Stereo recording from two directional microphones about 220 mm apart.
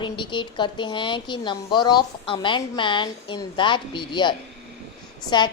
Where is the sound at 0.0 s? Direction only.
20° left (ahead or behind).